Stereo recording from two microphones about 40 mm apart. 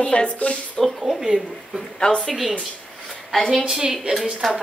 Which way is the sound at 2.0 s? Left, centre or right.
Centre.